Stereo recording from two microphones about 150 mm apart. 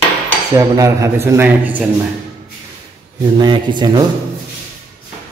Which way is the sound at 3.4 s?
30° right (ahead or behind).